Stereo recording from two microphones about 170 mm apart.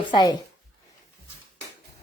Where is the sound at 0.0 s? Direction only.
25° left (ahead or behind).